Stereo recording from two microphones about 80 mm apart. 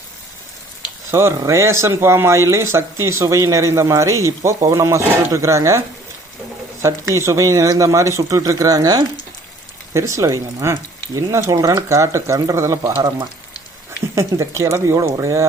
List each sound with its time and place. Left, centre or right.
1.4 s speech: right
6.8 s speech: right
9.9 s speech: right
11.5 s speech: right
11.9 s speech: right
14.2 s speech: right